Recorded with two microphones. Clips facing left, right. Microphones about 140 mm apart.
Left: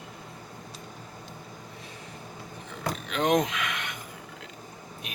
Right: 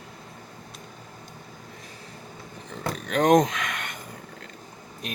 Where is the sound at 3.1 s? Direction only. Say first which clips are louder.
Right 6 dB; 45° right (ahead or behind).